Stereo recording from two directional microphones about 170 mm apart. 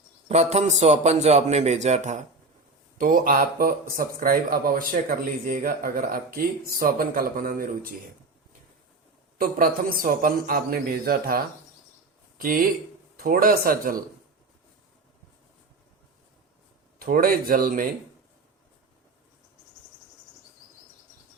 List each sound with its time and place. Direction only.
0.3 s a man's voice: 40° right (ahead or behind)
3.0 s speech: 55° right (ahead or behind)
9.4 s speech: 55° right (ahead or behind)
17.0 s speech: 55° right (ahead or behind)